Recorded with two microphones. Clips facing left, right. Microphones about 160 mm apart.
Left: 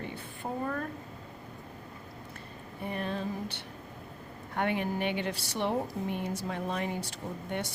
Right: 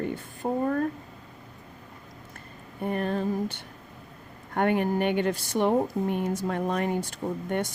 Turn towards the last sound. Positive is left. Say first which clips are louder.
# right 7 dB
turn(degrees=-50)  # may be behind; listen again after turning